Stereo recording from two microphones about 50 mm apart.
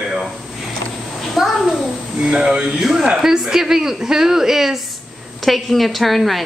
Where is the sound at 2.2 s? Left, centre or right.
Centre.